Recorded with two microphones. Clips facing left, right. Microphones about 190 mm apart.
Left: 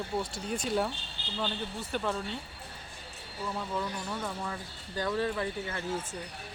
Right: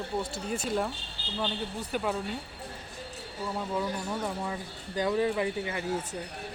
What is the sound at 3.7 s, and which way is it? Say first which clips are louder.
Speech: right 3 dB; 15° right (ahead or behind).